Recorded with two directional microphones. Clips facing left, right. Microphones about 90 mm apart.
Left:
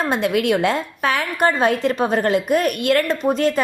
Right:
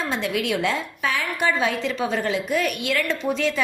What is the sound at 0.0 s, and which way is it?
A woman's voice, 55° left (ahead or behind).